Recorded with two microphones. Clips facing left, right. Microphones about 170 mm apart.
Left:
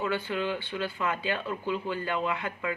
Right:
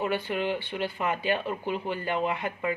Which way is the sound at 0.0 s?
15° right (ahead or behind).